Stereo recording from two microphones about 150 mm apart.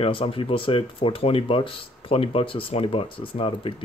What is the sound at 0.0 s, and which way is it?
Speech, 40° left (ahead or behind).